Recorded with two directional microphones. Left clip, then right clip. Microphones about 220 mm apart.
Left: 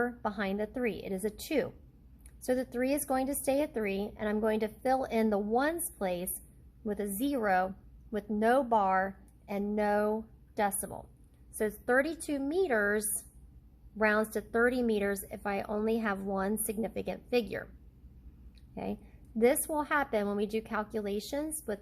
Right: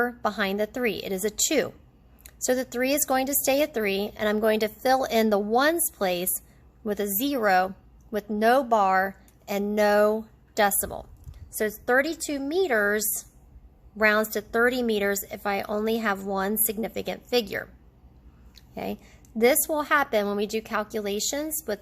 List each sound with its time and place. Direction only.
0.0 s a woman's voice: 20° right (ahead or behind)